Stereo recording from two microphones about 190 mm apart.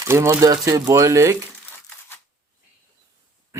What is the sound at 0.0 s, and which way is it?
A man's voice, 15° right (ahead or behind).